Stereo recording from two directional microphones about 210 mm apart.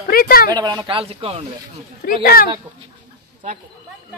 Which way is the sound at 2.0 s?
45° left (ahead or behind).